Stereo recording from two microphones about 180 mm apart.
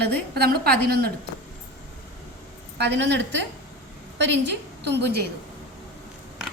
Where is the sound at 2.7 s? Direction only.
70° right (ahead or behind).